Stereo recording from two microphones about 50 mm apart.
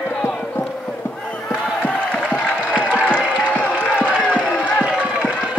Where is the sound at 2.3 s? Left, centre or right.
Left.